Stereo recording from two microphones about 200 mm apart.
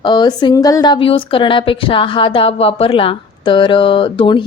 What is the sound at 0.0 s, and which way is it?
A woman's voice, 20° left (ahead or behind).